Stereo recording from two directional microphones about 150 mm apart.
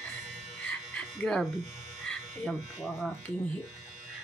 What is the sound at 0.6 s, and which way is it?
Chicken, 5° left (ahead or behind).